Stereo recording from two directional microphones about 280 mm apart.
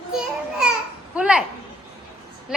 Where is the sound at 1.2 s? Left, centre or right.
Centre.